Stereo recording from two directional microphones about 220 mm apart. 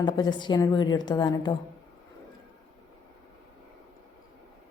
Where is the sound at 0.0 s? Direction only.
20° left (ahead or behind).